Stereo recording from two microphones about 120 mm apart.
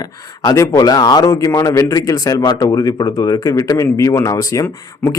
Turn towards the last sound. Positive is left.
turn(degrees=30)  # may be behind; listen again after turning